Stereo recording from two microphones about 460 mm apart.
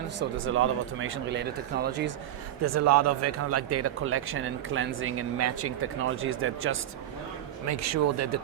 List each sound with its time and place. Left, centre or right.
0.2 s speech: right
2.6 s speech: right